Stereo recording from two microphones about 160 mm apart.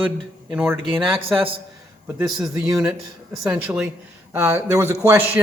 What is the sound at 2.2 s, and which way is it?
Speech, 25° right (ahead or behind).